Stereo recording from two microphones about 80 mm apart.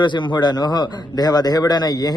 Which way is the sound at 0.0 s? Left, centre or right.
Left.